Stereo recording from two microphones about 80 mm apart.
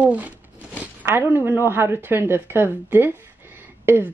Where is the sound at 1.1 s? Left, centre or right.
Right.